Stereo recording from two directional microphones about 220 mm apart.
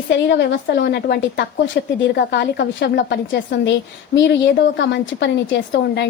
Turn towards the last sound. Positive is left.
turn(degrees=50)  # may be behind; listen again after turning